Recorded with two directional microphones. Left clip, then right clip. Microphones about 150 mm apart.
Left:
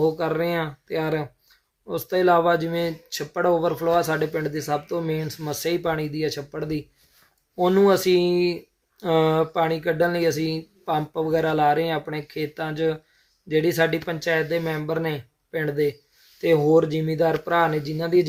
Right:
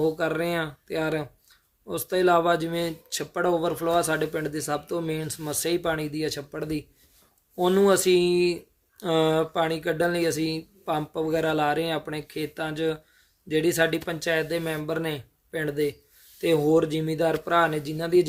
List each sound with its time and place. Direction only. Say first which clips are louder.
0.0 s speech: left 3 dB; 45° right (ahead or behind)
10.3 s speech: left 2 dB; 5° right (ahead or behind)
10.8 s speech: left 3 dB; 45° right (ahead or behind)